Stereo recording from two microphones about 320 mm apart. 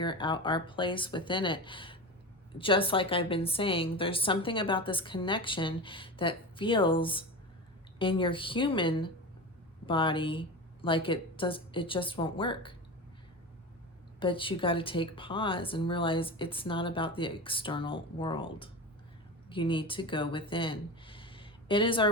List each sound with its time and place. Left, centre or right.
0.0 s a woman's voice: centre
14.2 s a woman's voice: centre